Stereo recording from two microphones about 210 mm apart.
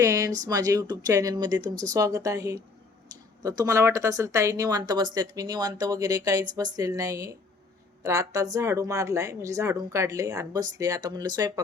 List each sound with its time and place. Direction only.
0.0 s speech: 15° right (ahead or behind)